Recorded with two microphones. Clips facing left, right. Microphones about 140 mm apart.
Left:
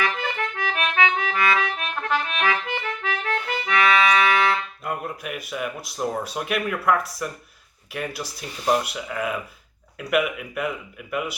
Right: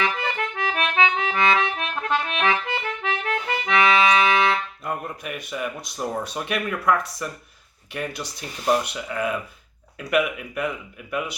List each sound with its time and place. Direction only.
0.0 s accordion: 25° right (ahead or behind)
4.8 s speech: centre (ahead or behind)